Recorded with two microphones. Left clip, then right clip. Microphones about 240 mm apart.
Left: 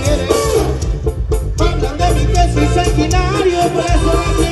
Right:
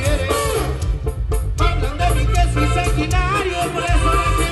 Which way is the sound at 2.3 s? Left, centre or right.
Centre.